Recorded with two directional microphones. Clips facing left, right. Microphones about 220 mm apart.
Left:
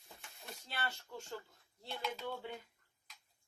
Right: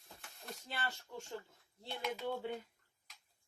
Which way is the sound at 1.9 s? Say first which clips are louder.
Right 2 dB; 20° right (ahead or behind).